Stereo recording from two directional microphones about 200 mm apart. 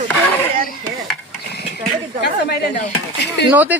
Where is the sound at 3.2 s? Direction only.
55° left (ahead or behind).